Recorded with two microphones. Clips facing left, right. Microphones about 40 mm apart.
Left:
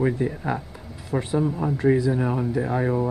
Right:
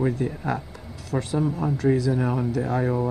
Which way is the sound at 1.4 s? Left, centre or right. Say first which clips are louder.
Left 1 dB; centre.